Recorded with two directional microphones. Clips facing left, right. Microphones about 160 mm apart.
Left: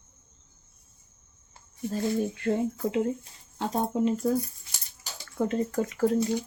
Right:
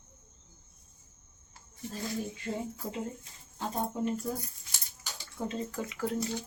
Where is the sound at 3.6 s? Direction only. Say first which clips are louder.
Left 6 dB; 85° left.